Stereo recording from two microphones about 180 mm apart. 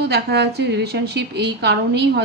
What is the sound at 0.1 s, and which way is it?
A woman's voice, 65° right (ahead or behind).